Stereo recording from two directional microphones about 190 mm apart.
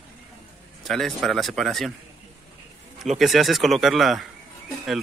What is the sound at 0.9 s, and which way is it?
Speech, centre (ahead or behind).